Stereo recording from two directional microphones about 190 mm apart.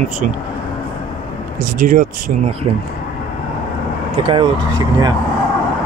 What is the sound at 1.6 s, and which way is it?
Speech, 45° right (ahead or behind).